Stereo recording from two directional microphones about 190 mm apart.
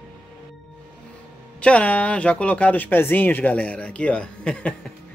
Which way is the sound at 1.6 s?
5° left (ahead or behind).